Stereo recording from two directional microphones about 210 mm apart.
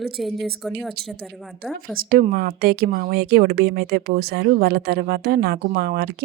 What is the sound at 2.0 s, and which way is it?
Speech, 45° right (ahead or behind).